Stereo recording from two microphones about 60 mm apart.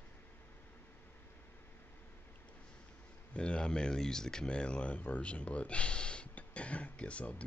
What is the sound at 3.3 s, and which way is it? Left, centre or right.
Speech, centre.